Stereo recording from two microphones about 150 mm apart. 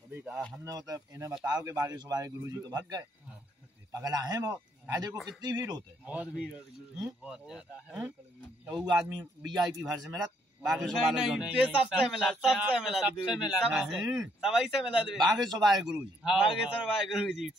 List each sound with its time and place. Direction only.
0.1 s speech: 15° right (ahead or behind)
0.7 s speech: 25° right (ahead or behind)
5.1 s a man's voice: centre (ahead or behind)
5.4 s speech: 25° right (ahead or behind)
6.0 s a man's voice: 10° right (ahead or behind)
9.2 s speech: 25° right (ahead or behind)
10.6 s a man's voice: 5° right (ahead or behind)